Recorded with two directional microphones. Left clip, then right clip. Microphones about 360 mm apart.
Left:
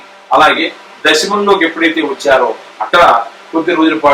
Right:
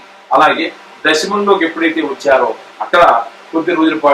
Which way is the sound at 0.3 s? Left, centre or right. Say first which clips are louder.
Left 2 dB; centre.